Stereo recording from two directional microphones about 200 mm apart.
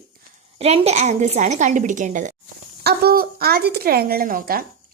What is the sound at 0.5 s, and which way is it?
A woman's voice, 30° right (ahead or behind).